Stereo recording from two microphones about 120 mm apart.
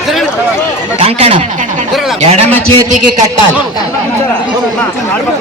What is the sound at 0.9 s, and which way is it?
Speech, 50° right (ahead or behind).